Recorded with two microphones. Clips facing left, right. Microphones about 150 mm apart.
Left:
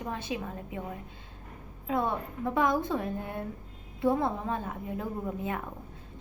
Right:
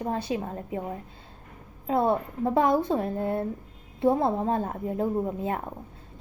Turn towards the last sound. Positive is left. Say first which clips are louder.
# right 6 dB
turn(degrees=-30)  # may be behind; listen again after turning